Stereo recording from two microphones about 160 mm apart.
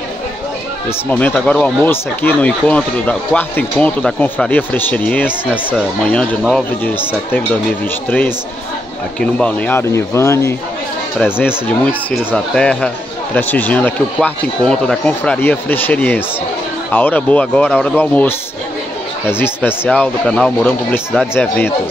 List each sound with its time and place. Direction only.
0.8 s speech: 10° left (ahead or behind)
5.5 s speech: 10° right (ahead or behind)
6.0 s speech: 10° left (ahead or behind)
9.2 s speech: 10° left (ahead or behind)